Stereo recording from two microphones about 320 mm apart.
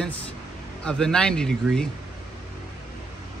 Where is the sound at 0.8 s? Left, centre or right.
Centre.